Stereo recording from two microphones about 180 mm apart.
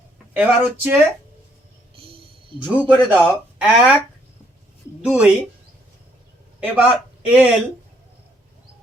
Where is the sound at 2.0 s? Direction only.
30° right (ahead or behind).